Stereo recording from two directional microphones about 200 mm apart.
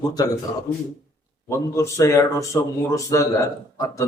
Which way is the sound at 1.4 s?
15° left (ahead or behind).